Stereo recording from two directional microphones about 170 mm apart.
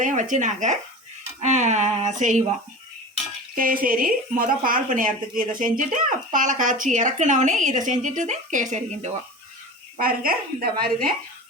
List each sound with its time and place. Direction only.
0.0 s a woman's voice: 50° right (ahead or behind)
3.5 s a woman's voice: 55° right (ahead or behind)
10.0 s a woman's voice: 60° right (ahead or behind)